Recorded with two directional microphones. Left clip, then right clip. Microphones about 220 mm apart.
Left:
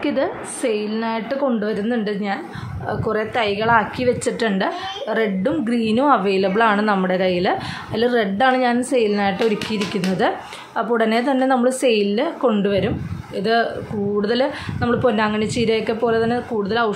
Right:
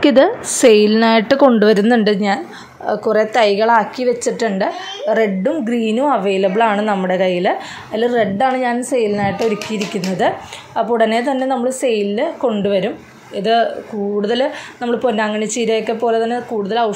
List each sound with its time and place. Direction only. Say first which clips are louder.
0.0 s a woman's voice: right 10 dB; 35° right (ahead or behind)
2.9 s a woman's voice: right 7 dB; 20° right (ahead or behind); by 16.9 s centre (ahead or behind)